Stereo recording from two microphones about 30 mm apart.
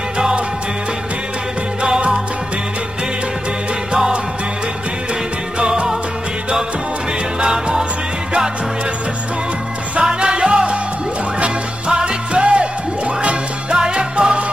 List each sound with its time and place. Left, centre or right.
5.7 s music: right
10.2 s music: right
11.9 s music: right